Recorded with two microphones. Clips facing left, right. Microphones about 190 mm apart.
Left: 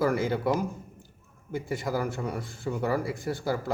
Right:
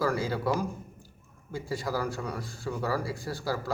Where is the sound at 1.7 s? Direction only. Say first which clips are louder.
Left 1 dB; 20° left (ahead or behind).